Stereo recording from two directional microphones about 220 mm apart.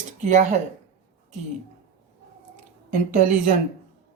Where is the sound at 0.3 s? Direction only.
30° right (ahead or behind).